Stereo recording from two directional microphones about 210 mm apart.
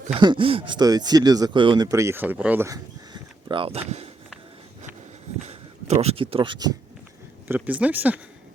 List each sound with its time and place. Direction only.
0.1 s speech: 25° right (ahead or behind)
5.4 s a sound: 30° right (ahead or behind)
7.4 s speech: 10° right (ahead or behind)